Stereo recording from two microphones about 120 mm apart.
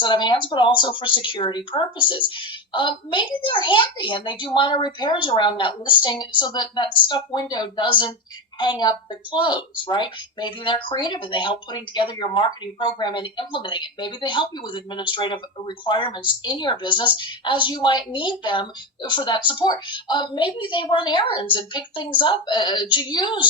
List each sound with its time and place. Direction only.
0.0 s speech: 40° left (ahead or behind)